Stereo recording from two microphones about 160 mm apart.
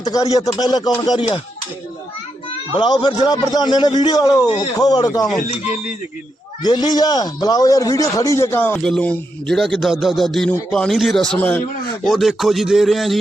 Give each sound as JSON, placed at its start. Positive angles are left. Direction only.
{"t": 0.0, "sound": "a man's voice", "side_deg": 20}
{"t": 2.7, "sound": "a man's voice", "side_deg": 30}
{"t": 6.6, "sound": "a man's voice", "side_deg": 25}